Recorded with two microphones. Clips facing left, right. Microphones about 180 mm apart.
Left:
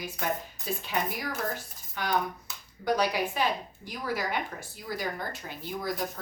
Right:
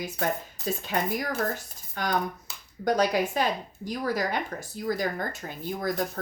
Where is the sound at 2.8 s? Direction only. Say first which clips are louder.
Right 3 dB; 45° right (ahead or behind).